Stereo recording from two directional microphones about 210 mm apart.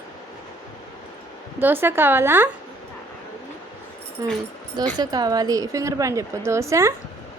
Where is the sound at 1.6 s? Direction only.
10° right (ahead or behind).